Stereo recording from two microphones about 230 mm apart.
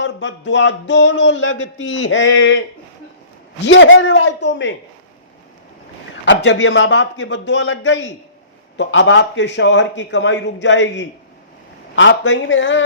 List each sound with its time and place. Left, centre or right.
0.0 s speech: left
3.6 s speech: left
6.2 s speech: left